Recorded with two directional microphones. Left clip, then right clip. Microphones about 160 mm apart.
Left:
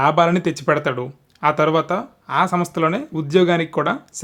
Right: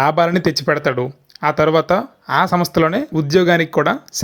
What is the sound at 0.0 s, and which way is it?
Speech, 30° right (ahead or behind).